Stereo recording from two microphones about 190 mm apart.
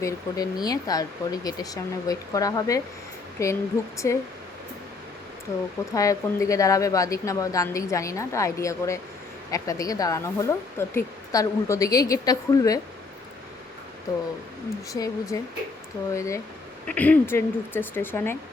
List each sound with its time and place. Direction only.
0.0 s speech: 20° left (ahead or behind)
5.9 s speech: 15° left (ahead or behind)
14.9 s speech: 20° left (ahead or behind)